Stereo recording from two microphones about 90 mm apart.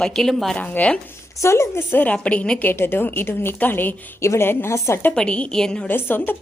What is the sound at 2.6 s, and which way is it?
A woman's voice, 25° left (ahead or behind).